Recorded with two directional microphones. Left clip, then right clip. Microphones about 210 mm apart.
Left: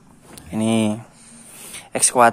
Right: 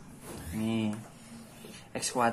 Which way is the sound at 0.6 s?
45° left (ahead or behind).